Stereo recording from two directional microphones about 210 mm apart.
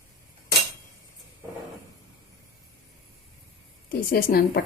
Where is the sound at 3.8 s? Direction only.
45° left (ahead or behind).